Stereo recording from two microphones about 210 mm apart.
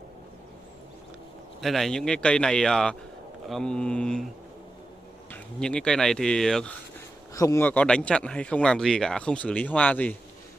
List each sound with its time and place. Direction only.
1.6 s speech: centre (ahead or behind)
5.3 s speech: 5° left (ahead or behind)
7.3 s speech: 15° left (ahead or behind)